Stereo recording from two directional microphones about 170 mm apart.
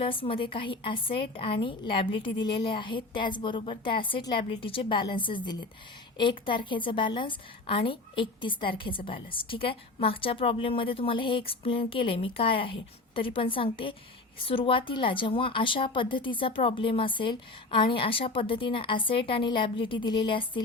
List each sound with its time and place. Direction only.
0.0 s a woman's voice: 30° left (ahead or behind)